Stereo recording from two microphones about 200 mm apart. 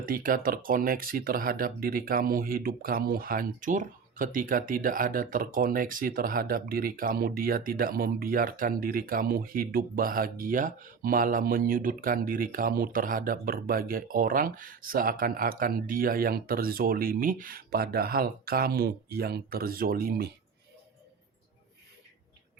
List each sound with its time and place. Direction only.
0.0 s speech: 45° right (ahead or behind)